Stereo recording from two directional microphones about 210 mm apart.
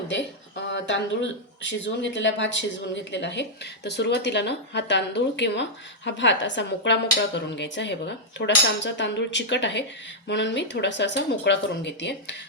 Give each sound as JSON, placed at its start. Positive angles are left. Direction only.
{"t": 0.7, "sound": "speech", "side_deg": 60}